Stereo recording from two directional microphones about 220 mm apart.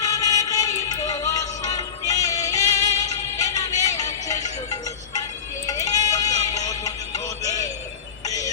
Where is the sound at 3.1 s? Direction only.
15° left (ahead or behind).